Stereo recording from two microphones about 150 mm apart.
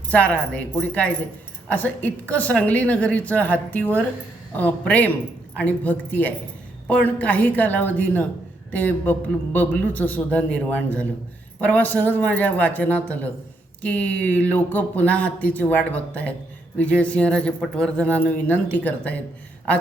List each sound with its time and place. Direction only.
0.1 s speech: 10° left (ahead or behind)